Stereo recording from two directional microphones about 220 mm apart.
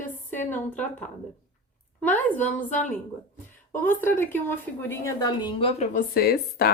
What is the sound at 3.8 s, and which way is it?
A woman's voice, 10° left (ahead or behind).